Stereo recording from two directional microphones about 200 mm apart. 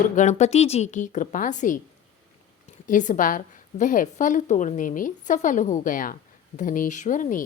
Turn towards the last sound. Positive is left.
turn(degrees=40)  # may be behind; listen again after turning